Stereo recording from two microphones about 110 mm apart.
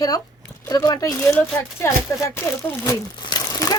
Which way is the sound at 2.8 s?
35° left (ahead or behind).